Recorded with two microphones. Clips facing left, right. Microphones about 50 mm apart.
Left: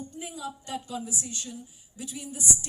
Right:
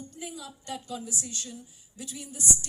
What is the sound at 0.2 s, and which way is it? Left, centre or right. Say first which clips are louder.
A man's voice: left 3 dB; centre.